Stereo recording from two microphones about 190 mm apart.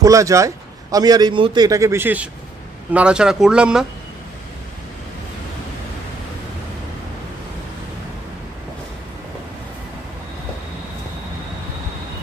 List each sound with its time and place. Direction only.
0.0 s a man's voice: 15° right (ahead or behind)